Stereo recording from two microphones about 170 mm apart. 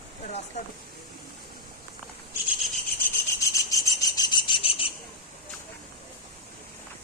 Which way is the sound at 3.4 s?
20° left (ahead or behind).